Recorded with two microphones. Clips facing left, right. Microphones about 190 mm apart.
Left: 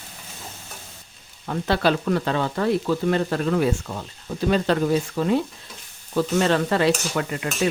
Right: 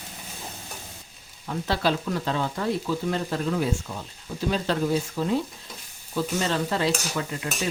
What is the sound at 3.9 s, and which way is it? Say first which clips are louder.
Speech: left 4 dB; 50° left (ahead or behind).